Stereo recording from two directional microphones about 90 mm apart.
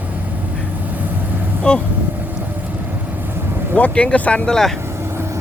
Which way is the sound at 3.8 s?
15° left (ahead or behind).